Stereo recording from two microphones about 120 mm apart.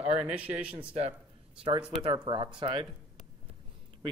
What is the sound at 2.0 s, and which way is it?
Speech, 45° right (ahead or behind).